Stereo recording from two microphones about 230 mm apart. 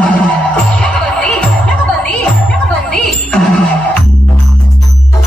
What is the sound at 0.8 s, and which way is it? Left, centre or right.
Music, centre.